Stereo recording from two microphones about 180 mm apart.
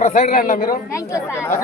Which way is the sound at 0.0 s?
40° left (ahead or behind).